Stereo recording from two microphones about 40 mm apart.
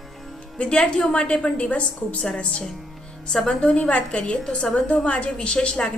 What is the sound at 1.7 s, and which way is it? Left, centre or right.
Speech, left.